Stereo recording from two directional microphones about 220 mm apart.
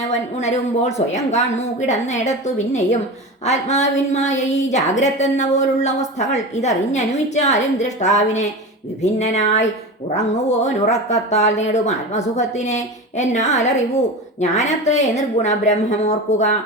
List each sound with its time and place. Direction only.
0.1 s a woman's voice: 30° left (ahead or behind)
3.4 s a woman's voice: 30° left (ahead or behind)